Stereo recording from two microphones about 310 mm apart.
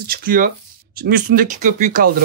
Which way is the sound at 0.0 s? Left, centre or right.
Right.